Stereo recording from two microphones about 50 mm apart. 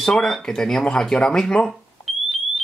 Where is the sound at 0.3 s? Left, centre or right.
Centre.